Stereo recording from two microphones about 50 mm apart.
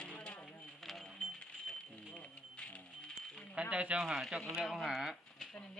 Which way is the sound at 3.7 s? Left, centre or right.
Right.